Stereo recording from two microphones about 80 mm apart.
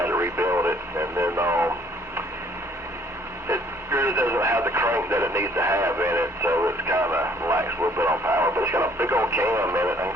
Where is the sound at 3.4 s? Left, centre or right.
Right.